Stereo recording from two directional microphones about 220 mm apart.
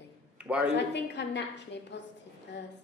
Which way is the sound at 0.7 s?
50° left (ahead or behind).